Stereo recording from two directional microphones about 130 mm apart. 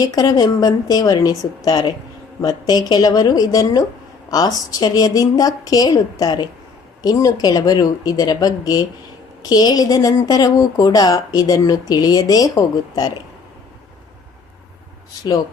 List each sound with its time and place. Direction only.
0.0 s a woman's voice: 30° left (ahead or behind)